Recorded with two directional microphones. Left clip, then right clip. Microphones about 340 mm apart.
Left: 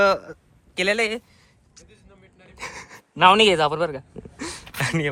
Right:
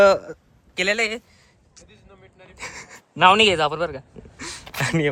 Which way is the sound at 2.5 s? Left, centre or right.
Centre.